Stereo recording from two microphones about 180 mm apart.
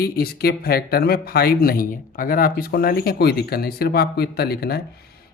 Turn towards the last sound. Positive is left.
turn(degrees=60)  # may be behind; listen again after turning